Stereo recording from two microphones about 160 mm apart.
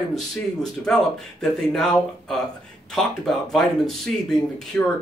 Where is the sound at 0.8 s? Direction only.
5° left (ahead or behind).